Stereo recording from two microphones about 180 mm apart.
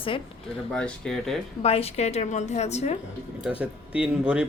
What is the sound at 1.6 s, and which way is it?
A woman's voice, 35° left (ahead or behind).